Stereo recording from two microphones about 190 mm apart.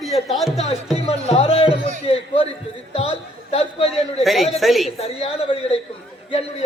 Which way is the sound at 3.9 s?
Centre (ahead or behind).